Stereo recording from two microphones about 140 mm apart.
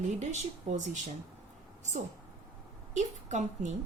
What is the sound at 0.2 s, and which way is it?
Speech, 55° right (ahead or behind).